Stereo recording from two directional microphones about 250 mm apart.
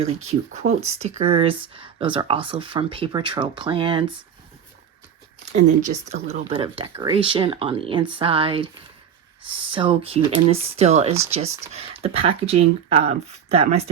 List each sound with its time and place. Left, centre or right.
0.0 s speech: right
6.1 s speech: right